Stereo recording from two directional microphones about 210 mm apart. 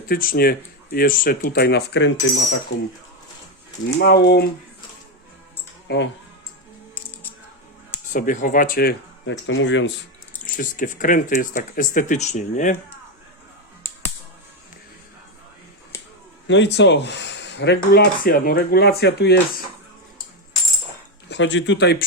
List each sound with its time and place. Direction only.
0.1 s speech: 45° left (ahead or behind); by 2.6 s 60° left (ahead or behind)
3.8 s speech: 55° left (ahead or behind)
5.9 s speech: 50° left (ahead or behind)
8.1 s speech: 40° left (ahead or behind)
9.5 s speech: 65° left (ahead or behind)
10.6 s speech: 40° left (ahead or behind)
16.5 s speech: 55° left (ahead or behind)
21.2 s speech: 60° left (ahead or behind)